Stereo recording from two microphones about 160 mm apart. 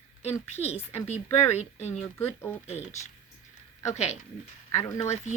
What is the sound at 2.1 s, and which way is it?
Speech, 15° left (ahead or behind).